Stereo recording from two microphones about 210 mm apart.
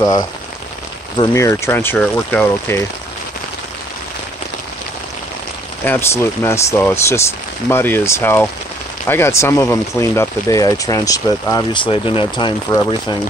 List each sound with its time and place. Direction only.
1.1 s speech: 20° left (ahead or behind)
5.9 s speech: 10° left (ahead or behind)